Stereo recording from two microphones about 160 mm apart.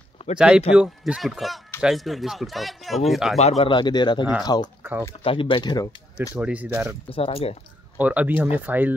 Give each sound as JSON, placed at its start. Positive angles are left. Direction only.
{"t": 0.4, "sound": "speech", "side_deg": -5}
{"t": 3.3, "sound": "speech", "side_deg": 40}
{"t": 6.3, "sound": "speech", "side_deg": -10}
{"t": 7.1, "sound": "speech", "side_deg": 35}
{"t": 8.0, "sound": "speech", "side_deg": -10}